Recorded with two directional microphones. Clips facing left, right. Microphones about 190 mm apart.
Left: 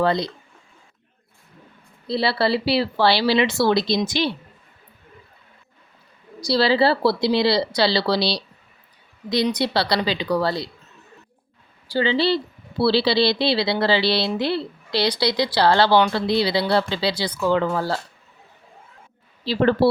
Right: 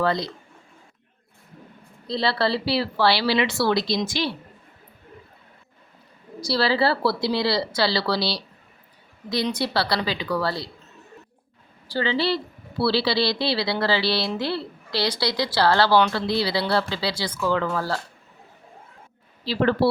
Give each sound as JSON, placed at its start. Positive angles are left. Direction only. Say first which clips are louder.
{"t": 0.0, "sound": "speech", "louder": "left 3 dB", "side_deg": 20}
{"t": 2.0, "sound": "speech", "louder": "left 2 dB", "side_deg": 10}
{"t": 6.4, "sound": "a woman's voice", "louder": "left 4 dB", "side_deg": 15}
{"t": 11.9, "sound": "a woman's voice", "louder": "left 4 dB", "side_deg": 15}
{"t": 19.5, "sound": "speech", "louder": "left 3 dB", "side_deg": 25}